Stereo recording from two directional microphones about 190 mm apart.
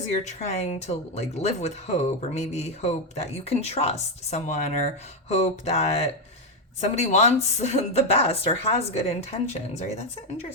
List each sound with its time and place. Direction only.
0.1 s speech: 35° left (ahead or behind)